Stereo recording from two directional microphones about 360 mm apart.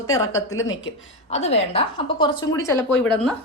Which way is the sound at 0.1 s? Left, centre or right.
Centre.